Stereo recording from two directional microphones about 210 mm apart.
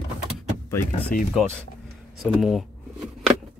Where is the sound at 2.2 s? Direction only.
Centre (ahead or behind).